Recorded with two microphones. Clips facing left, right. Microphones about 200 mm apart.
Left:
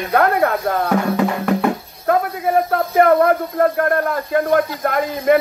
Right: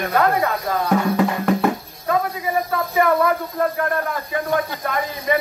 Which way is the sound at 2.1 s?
55° left (ahead or behind).